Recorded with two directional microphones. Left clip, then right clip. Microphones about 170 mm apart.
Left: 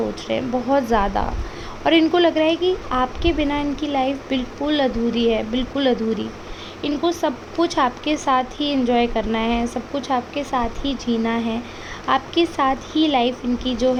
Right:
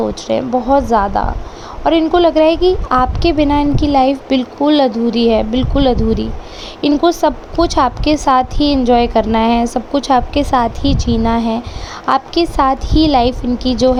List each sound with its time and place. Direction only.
0.0 s a woman's voice: 25° right (ahead or behind)